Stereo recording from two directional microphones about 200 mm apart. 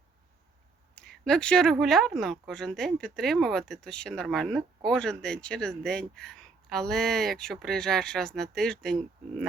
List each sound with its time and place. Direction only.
0.9 s speech: 5° left (ahead or behind)